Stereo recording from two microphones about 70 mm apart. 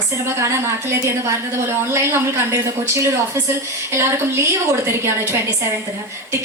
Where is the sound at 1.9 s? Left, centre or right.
Right.